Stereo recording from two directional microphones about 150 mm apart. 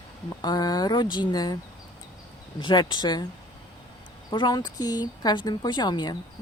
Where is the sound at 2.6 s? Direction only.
30° left (ahead or behind).